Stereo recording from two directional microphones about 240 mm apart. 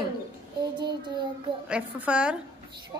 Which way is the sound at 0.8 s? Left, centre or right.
Centre.